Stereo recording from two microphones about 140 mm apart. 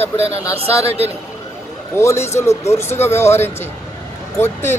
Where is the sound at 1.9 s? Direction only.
20° left (ahead or behind).